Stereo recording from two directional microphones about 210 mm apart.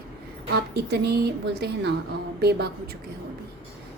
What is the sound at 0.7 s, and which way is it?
A woman's voice, 50° right (ahead or behind).